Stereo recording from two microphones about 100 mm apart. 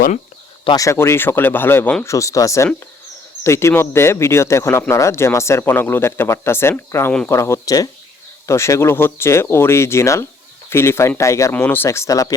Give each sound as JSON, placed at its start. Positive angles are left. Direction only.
{"t": 0.8, "sound": "speech", "side_deg": 30}
{"t": 2.0, "sound": "speech", "side_deg": 30}
{"t": 11.5, "sound": "speech", "side_deg": 20}